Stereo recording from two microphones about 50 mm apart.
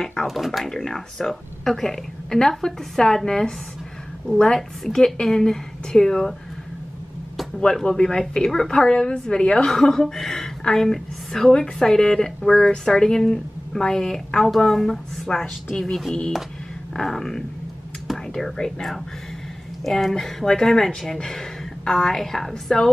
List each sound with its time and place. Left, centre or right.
0.0 s speech: centre
0.3 s speech: centre
7.8 s speech: centre
9.7 s a woman's voice: centre